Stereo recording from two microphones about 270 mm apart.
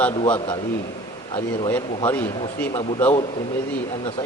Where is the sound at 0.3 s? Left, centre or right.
Centre.